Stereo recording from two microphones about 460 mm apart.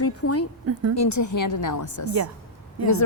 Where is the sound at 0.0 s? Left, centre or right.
Left.